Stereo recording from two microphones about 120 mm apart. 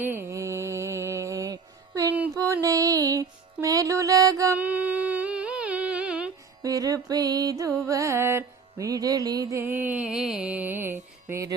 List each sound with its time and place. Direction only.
0.0 s mantra: 15° right (ahead or behind)
2.3 s music: 25° right (ahead or behind)
4.5 s humming: 10° right (ahead or behind)
6.6 s music: 30° right (ahead or behind)